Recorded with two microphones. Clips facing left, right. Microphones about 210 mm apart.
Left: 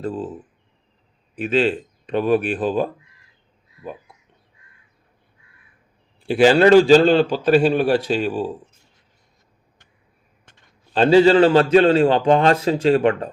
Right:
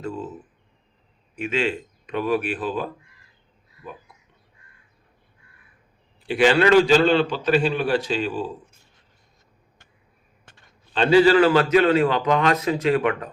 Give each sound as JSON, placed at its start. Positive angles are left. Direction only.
{"t": 0.0, "sound": "a man's voice", "side_deg": 35}
{"t": 1.4, "sound": "a man's voice", "side_deg": 35}
{"t": 6.2, "sound": "a man's voice", "side_deg": 40}
{"t": 10.9, "sound": "a man's voice", "side_deg": 40}
{"t": 11.2, "sound": "a man's voice", "side_deg": 25}